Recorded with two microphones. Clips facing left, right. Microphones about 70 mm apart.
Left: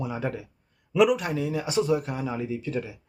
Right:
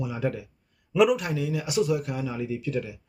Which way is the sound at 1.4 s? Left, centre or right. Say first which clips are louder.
Even; left.